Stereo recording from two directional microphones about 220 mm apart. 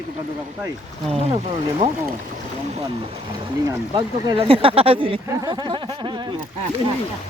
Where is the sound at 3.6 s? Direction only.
20° right (ahead or behind).